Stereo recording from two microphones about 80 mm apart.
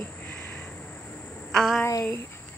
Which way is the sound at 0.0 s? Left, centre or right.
Left.